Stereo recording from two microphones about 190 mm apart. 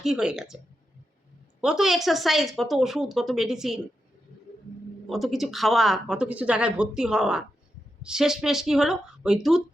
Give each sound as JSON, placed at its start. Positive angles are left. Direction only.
{"t": 0.0, "sound": "speech", "side_deg": -5}
{"t": 1.6, "sound": "speech", "side_deg": 0}
{"t": 5.0, "sound": "speech", "side_deg": 0}